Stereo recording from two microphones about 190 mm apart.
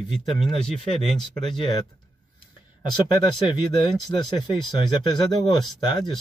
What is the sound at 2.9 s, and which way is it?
Speech, 25° left (ahead or behind).